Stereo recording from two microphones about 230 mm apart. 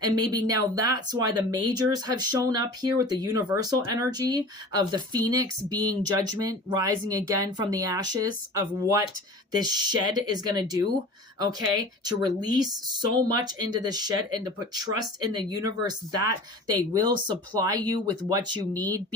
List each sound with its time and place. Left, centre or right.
0.0 s speech: centre
12.0 s speech: centre